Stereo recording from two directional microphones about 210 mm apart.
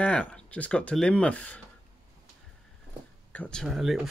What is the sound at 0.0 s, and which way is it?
Speech, 5° left (ahead or behind).